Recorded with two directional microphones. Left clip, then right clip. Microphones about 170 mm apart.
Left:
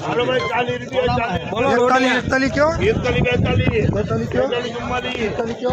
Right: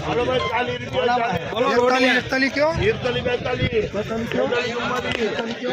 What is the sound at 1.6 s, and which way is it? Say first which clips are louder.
A man's voice: left 2 dB; 65° left (ahead or behind).